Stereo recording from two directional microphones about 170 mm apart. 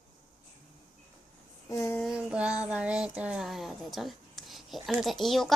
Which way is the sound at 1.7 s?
20° left (ahead or behind).